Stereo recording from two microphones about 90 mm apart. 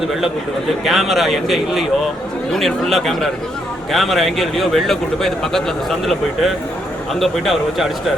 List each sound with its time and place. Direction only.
0.9 s a man's voice: centre (ahead or behind)